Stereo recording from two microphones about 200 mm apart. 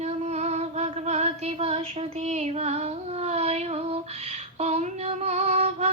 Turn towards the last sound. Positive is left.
turn(degrees=-35)  # may be behind; listen again after turning